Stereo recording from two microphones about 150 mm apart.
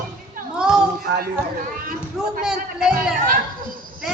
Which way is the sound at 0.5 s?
5° right (ahead or behind).